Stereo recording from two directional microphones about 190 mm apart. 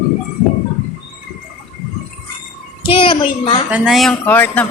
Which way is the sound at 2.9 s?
25° left (ahead or behind).